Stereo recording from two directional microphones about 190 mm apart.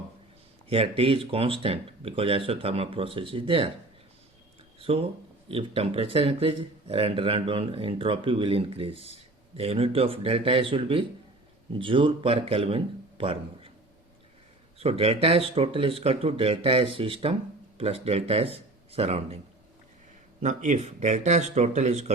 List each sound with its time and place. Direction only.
0.7 s speech: 30° right (ahead or behind)
4.8 s speech: 30° right (ahead or behind)
14.8 s speech: 30° right (ahead or behind)
20.4 s speech: 40° right (ahead or behind)